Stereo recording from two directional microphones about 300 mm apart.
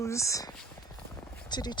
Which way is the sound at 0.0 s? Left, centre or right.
Centre.